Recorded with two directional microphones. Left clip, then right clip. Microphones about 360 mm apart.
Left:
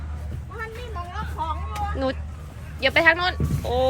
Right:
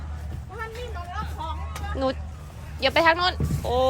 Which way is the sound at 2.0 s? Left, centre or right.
Centre.